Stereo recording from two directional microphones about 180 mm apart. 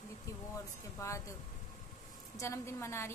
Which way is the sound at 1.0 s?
15° left (ahead or behind).